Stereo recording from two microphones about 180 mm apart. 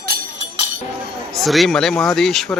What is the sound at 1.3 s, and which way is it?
Speech, centre (ahead or behind).